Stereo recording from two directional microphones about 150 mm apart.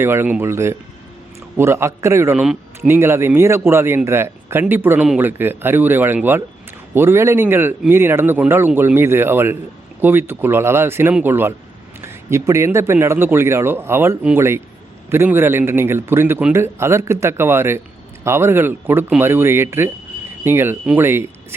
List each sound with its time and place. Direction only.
0.0 s a man's voice: 15° right (ahead or behind)
2.3 s speech: 5° right (ahead or behind)
2.8 s a man's voice: 15° right (ahead or behind)